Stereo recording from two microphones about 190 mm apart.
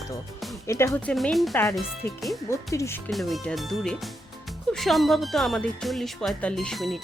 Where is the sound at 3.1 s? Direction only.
Centre (ahead or behind).